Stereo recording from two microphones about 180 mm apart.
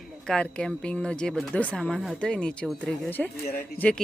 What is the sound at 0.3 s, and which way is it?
Speech, 5° left (ahead or behind).